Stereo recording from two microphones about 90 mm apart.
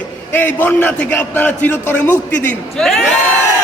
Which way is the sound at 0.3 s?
20° left (ahead or behind).